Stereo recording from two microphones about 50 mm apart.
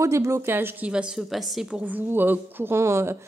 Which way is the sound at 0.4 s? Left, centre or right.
Right.